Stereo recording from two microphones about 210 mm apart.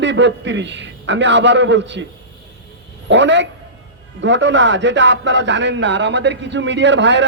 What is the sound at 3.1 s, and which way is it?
A man's voice, 60° right (ahead or behind).